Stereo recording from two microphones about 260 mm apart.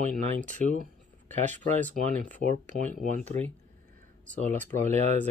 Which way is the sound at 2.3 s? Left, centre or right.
Right.